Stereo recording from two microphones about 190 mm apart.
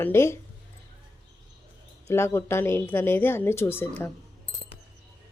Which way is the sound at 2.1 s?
15° left (ahead or behind).